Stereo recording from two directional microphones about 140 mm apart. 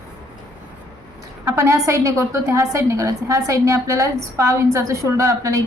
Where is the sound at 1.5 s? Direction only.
20° right (ahead or behind).